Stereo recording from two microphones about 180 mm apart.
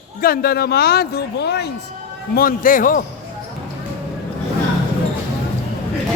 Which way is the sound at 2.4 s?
50° left (ahead or behind).